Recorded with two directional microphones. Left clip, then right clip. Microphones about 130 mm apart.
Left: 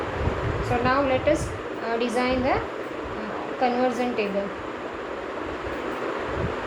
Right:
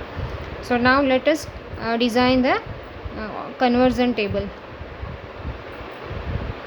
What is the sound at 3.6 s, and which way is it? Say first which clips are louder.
Speech: right 5 dB; 55° right (ahead or behind).